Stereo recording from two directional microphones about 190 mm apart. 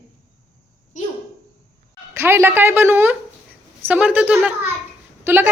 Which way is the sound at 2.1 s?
15° right (ahead or behind).